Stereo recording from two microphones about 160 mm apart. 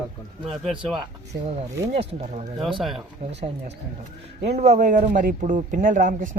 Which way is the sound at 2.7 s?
Centre (ahead or behind).